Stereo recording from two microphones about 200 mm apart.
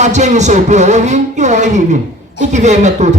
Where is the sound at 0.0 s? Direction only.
35° right (ahead or behind).